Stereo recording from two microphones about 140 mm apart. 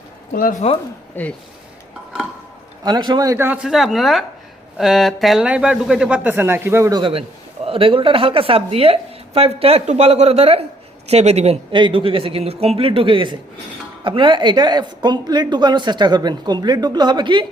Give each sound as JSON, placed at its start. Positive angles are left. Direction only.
{"t": 0.6, "sound": "speech", "side_deg": 45}
{"t": 1.2, "sound": "speech", "side_deg": 15}
{"t": 2.8, "sound": "a man's voice", "side_deg": -30}
{"t": 3.3, "sound": "speech", "side_deg": -15}
{"t": 7.0, "sound": "a man's voice", "side_deg": -45}
{"t": 11.7, "sound": "a woman's voice", "side_deg": -35}